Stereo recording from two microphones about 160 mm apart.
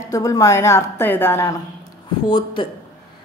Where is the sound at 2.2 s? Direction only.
30° left (ahead or behind).